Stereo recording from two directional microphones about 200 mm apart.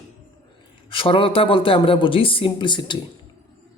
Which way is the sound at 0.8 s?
25° left (ahead or behind).